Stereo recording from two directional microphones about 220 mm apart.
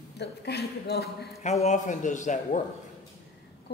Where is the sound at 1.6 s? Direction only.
35° left (ahead or behind).